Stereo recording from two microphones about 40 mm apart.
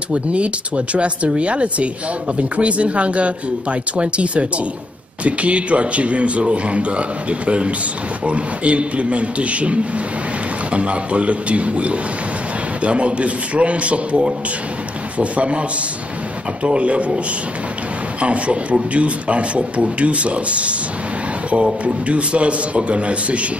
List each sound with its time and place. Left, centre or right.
0.1 s a man's voice: right
16.6 s a man's voice: right
18.2 s speech: right
21.8 s speech: right